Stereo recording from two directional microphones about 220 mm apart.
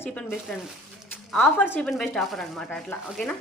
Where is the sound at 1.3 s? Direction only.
5° left (ahead or behind).